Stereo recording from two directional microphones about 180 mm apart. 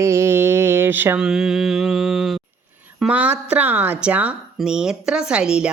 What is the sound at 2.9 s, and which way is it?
Speech, 5° right (ahead or behind).